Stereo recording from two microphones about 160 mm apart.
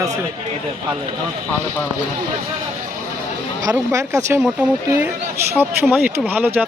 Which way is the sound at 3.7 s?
20° right (ahead or behind).